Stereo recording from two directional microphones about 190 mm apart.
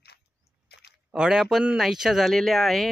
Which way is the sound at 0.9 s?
5° right (ahead or behind).